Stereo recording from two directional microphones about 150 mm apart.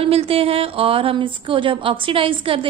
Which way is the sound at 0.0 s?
40° right (ahead or behind).